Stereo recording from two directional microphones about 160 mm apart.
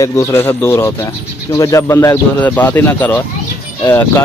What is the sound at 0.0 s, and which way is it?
Speech, 20° left (ahead or behind).